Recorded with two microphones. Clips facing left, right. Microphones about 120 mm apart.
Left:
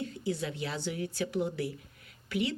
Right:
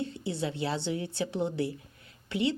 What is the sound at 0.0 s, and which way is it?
A woman's voice, 30° right (ahead or behind).